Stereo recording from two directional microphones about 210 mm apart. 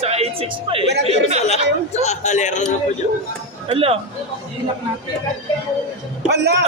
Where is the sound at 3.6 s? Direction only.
25° right (ahead or behind).